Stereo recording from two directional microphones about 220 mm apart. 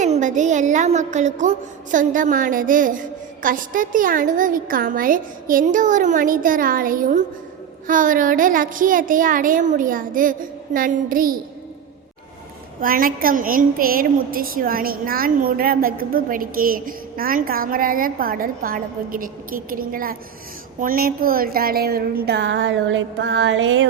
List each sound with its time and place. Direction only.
0.0 s a woman's voice: 35° right (ahead or behind)
12.8 s a woman's voice: 40° right (ahead or behind); by 23.9 s 60° right (ahead or behind)